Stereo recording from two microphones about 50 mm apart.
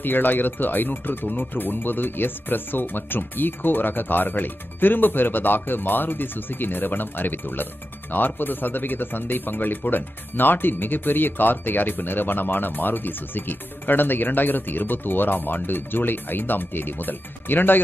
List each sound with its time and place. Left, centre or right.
0.0 s speech: left